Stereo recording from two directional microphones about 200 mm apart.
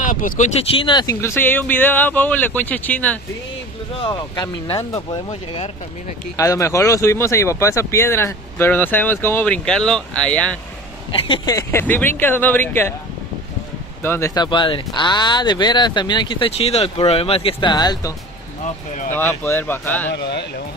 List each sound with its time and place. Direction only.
0.0 s speech: 40° left (ahead or behind); by 3.2 s 10° left (ahead or behind)
4.0 s speech: 20° left (ahead or behind)
6.3 s speech: 15° left (ahead or behind)
11.1 s speech: 25° left (ahead or behind); by 12.9 s 10° left (ahead or behind)
14.0 s speech: 15° left (ahead or behind)
19.1 s speech: 10° left (ahead or behind)
20.2 s speech: 55° left (ahead or behind)